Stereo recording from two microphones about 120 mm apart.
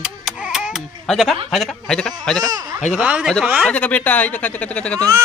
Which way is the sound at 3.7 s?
10° left (ahead or behind).